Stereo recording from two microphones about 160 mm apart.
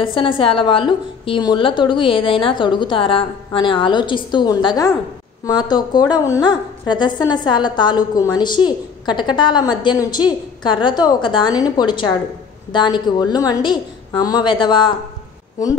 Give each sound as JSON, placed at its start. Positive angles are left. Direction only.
{"t": 0.0, "sound": "a woman's voice", "side_deg": 30}